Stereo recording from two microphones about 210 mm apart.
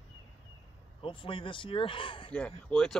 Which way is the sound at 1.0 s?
25° left (ahead or behind).